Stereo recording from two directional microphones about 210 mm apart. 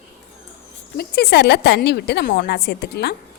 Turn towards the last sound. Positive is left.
turn(degrees=50)  # may be behind; listen again after turning